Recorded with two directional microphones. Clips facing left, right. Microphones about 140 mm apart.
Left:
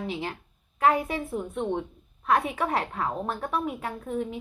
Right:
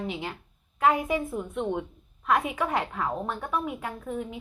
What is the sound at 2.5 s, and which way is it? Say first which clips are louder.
A woman's voice: even; 35° left (ahead or behind).